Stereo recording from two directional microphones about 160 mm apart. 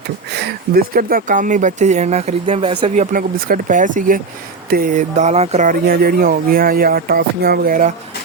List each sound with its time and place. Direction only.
0.3 s speech: 90° right; by 5.7 s 45° right (ahead or behind)
5.8 s speech: 75° right (ahead or behind)